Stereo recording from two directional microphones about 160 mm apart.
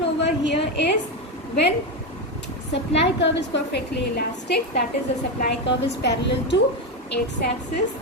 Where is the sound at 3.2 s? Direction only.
90° left.